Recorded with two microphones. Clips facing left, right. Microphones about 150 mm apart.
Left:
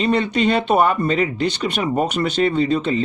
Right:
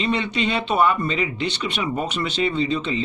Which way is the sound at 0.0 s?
45° left (ahead or behind).